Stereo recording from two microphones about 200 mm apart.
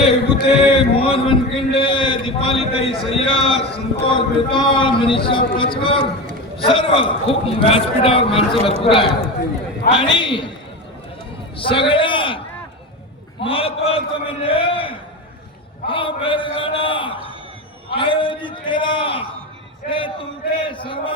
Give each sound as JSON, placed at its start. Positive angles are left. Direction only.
{"t": 0.0, "sound": "a sound", "side_deg": 30}
{"t": 6.6, "sound": "a man's voice", "side_deg": 25}
{"t": 11.5, "sound": "a man's voice", "side_deg": 25}
{"t": 13.4, "sound": "a man's voice", "side_deg": 30}
{"t": 20.7, "sound": "a man's voice", "side_deg": 25}